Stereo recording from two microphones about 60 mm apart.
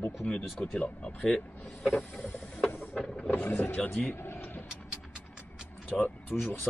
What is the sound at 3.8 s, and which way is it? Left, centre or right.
Speech, centre.